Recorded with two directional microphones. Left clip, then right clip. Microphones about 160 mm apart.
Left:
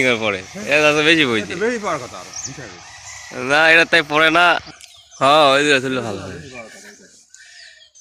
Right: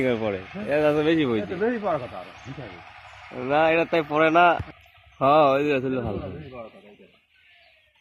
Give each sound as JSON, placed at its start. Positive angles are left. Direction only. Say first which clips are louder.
{"t": 0.0, "sound": "speech", "louder": "left 7 dB", "side_deg": -10}
{"t": 1.6, "sound": "speech", "louder": "left 3 dB", "side_deg": -40}
{"t": 3.4, "sound": "a man's voice", "louder": "left 8 dB", "side_deg": 0}